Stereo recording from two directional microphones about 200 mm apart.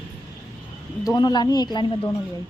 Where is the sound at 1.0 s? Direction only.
20° left (ahead or behind).